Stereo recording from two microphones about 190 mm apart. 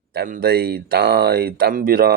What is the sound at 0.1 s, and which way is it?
Speech, 55° right (ahead or behind).